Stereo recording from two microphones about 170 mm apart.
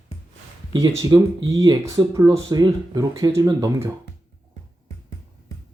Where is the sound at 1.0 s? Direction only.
20° right (ahead or behind).